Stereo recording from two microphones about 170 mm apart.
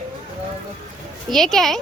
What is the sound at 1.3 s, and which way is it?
Speech, centre (ahead or behind).